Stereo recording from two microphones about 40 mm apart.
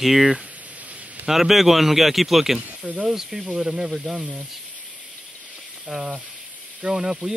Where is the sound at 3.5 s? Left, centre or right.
Right.